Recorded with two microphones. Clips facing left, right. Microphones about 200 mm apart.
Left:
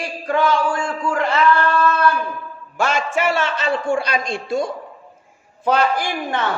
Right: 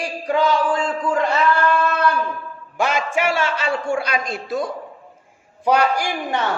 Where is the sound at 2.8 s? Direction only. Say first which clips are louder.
Even; 15° right (ahead or behind).